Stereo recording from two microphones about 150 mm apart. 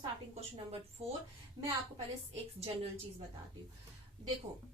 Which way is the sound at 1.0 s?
40° right (ahead or behind).